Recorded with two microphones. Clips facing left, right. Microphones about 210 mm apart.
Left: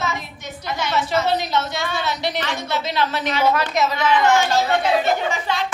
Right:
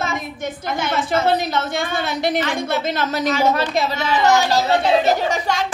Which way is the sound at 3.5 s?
30° right (ahead or behind).